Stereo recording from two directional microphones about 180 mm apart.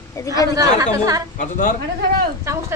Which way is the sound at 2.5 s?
15° right (ahead or behind).